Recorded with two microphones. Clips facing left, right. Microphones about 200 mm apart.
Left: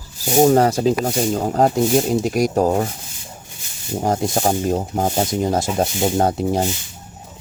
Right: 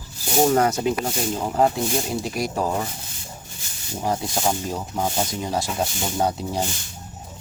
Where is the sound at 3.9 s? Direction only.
50° left (ahead or behind).